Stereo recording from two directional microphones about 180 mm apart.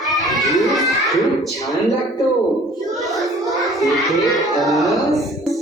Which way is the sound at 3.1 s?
Centre (ahead or behind).